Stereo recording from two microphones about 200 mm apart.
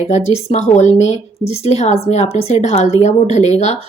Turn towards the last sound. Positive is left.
turn(degrees=35)  # may be behind; listen again after turning